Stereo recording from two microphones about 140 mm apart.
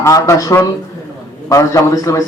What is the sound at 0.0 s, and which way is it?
Speech, 25° left (ahead or behind).